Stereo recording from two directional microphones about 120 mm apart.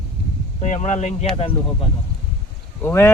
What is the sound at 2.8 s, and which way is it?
Speech, 20° left (ahead or behind).